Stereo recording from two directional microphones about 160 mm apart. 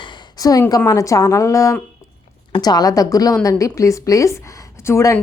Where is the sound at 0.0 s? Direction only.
25° left (ahead or behind).